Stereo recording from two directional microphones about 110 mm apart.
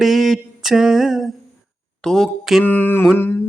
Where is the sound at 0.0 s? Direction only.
Centre (ahead or behind).